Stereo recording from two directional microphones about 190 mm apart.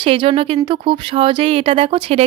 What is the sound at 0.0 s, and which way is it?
Speech, 30° right (ahead or behind).